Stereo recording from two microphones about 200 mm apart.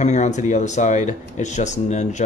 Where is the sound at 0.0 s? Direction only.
35° left (ahead or behind).